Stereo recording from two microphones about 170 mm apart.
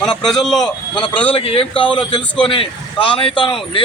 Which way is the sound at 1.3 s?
35° left (ahead or behind).